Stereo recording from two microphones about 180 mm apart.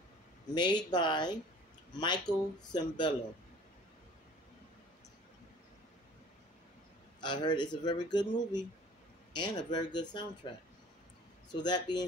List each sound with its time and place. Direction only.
0.6 s speech: 25° left (ahead or behind)
7.2 s speech: 25° left (ahead or behind)
11.6 s speech: 25° left (ahead or behind)